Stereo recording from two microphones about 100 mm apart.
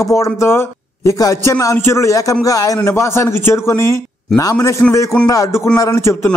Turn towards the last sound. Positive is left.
turn(degrees=30)  # may be behind; listen again after turning